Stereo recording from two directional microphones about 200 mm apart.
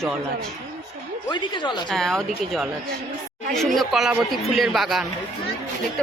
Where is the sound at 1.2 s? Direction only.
20° left (ahead or behind).